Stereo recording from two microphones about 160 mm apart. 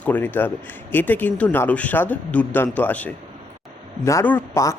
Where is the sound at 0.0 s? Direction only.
10° left (ahead or behind).